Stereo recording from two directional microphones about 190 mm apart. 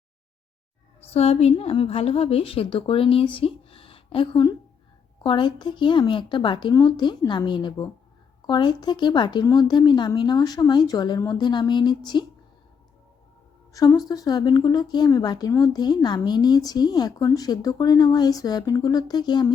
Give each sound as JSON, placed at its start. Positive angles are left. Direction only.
{"t": 1.1, "sound": "a woman's voice", "side_deg": 30}
{"t": 13.7, "sound": "a woman's voice", "side_deg": 20}